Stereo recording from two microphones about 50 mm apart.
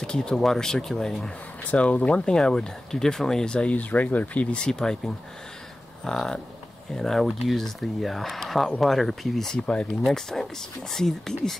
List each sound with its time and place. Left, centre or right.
0.0 s speech: centre
1.7 s speech: left
3.7 s speech: left; by 9.6 s centre
9.6 s speech: left
10.1 s speech: centre